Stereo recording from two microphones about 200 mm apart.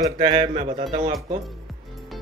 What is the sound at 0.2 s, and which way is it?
Speech, 30° right (ahead or behind).